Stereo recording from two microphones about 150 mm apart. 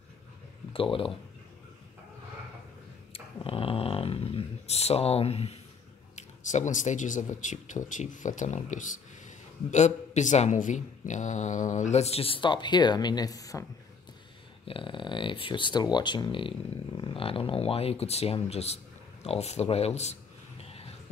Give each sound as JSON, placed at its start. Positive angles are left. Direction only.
{"t": 0.7, "sound": "speech", "side_deg": 35}
{"t": 3.1, "sound": "dog", "side_deg": 40}
{"t": 6.1, "sound": "speech", "side_deg": 50}
{"t": 14.7, "sound": "speech", "side_deg": 35}
{"t": 20.6, "sound": "a sound", "side_deg": 40}